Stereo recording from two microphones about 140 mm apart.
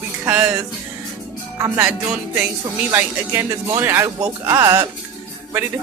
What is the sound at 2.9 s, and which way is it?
Speech, 15° right (ahead or behind).